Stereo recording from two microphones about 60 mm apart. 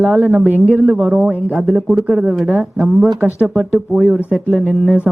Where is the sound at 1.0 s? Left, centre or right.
Centre.